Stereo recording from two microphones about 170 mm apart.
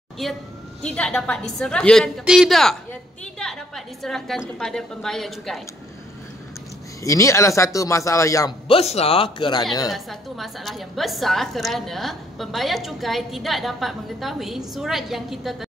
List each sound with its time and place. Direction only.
0.2 s a woman's voice: centre (ahead or behind)
7.0 s speech: 20° left (ahead or behind)
8.6 s speech: 35° left (ahead or behind)
9.8 s a woman's voice: centre (ahead or behind)